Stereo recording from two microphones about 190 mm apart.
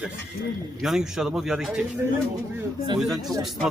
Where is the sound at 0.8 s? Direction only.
Centre (ahead or behind).